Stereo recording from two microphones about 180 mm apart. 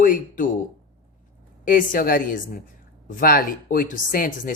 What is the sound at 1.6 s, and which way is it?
Speech, 50° left (ahead or behind).